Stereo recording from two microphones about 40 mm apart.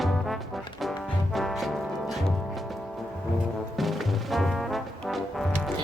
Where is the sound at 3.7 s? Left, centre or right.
Centre.